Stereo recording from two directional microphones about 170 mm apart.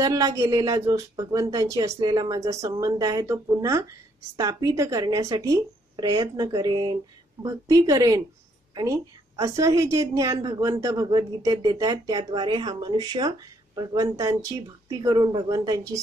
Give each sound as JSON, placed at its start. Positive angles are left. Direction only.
{"t": 0.0, "sound": "speech", "side_deg": -20}
{"t": 9.4, "sound": "speech", "side_deg": -20}